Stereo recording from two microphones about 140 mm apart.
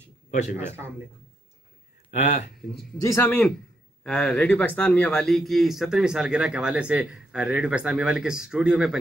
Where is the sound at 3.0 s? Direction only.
15° left (ahead or behind).